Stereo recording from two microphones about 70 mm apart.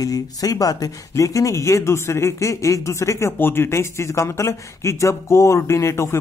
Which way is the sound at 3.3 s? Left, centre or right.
Left.